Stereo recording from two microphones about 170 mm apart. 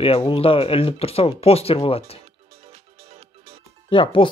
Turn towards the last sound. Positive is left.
turn(degrees=30)  # may be behind; listen again after turning